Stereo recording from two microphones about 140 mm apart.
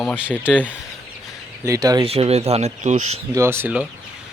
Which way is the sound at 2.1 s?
45° right (ahead or behind).